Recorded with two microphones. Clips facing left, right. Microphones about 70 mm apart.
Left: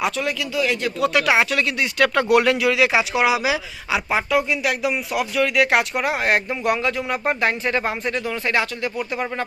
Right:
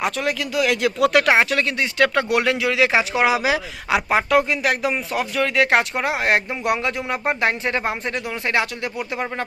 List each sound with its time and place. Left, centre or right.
0.0 s speech: right
1.2 s speech: right